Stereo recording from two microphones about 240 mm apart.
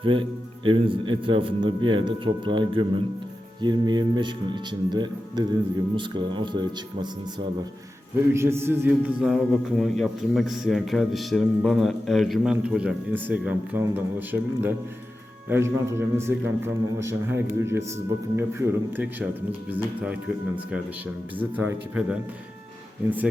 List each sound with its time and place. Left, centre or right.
0.0 s a man's voice: right
21.3 s a man's voice: centre